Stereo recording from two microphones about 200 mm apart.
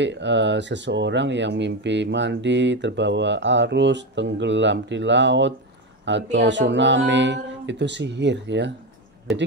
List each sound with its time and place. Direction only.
0.0 s speech: 60° right (ahead or behind)